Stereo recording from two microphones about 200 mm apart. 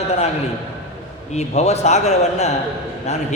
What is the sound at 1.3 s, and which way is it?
Speech, 35° left (ahead or behind).